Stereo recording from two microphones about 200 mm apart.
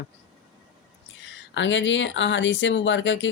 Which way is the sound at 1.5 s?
65° left (ahead or behind).